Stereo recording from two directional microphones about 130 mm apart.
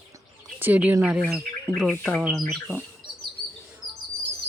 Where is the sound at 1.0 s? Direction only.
5° right (ahead or behind).